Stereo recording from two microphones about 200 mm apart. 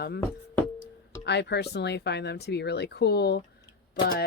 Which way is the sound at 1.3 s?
60° left (ahead or behind).